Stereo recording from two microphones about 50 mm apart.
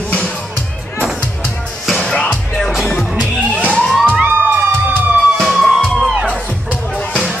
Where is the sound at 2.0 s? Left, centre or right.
Left.